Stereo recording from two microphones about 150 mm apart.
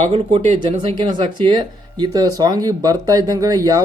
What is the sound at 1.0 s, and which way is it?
Speech, 30° right (ahead or behind).